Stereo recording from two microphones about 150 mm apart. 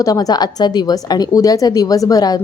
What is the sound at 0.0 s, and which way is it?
A woman's voice, 25° left (ahead or behind).